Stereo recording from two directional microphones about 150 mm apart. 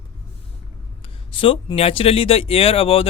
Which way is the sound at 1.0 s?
35° left (ahead or behind).